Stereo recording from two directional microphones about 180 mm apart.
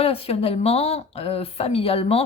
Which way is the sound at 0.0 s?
30° left (ahead or behind).